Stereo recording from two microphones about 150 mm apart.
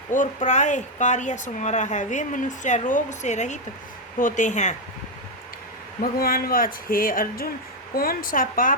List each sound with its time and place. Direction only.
0.1 s speech: 60° left (ahead or behind)
6.0 s speech: 85° left; by 8.7 s 65° left (ahead or behind)